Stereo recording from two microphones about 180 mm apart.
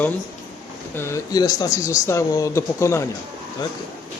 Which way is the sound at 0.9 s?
15° left (ahead or behind).